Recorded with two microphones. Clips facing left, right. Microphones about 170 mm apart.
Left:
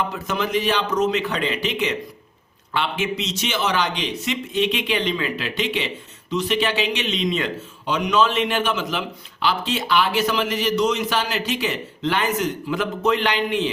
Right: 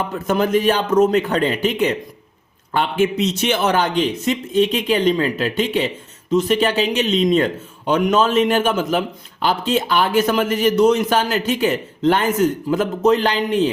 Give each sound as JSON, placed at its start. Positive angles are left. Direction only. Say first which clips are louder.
{"t": 0.1, "sound": "a man's voice", "louder": "right 6 dB", "side_deg": -50}